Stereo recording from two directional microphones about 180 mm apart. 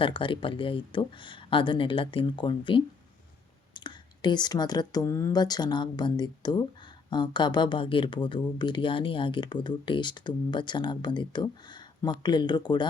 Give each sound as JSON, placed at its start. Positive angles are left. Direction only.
{"t": 0.0, "sound": "speech", "side_deg": 30}